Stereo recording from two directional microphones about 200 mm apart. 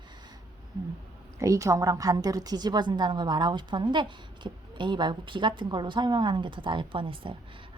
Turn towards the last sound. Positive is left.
turn(degrees=-25)  # may be behind; listen again after turning